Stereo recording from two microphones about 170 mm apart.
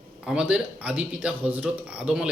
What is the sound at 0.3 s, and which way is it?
Speech, 5° right (ahead or behind).